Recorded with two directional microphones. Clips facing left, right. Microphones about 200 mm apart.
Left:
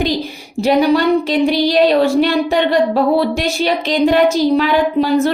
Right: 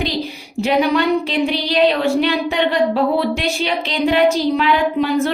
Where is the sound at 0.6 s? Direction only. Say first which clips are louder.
Left 4 dB; 40° left (ahead or behind).